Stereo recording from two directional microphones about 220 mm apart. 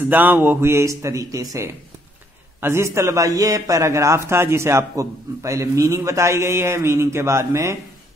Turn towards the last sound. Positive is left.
turn(degrees=-15)  # may be behind; listen again after turning